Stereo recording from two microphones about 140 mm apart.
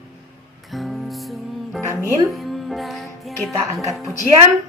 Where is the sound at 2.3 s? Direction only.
Centre (ahead or behind).